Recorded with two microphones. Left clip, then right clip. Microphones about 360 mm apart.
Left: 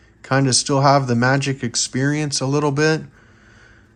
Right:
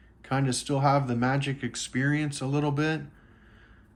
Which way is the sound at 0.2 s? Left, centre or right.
Centre.